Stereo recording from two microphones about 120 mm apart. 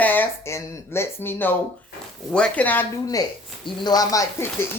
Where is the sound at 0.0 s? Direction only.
15° left (ahead or behind).